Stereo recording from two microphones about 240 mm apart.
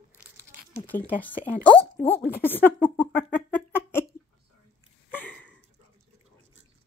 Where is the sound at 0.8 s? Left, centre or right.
Centre.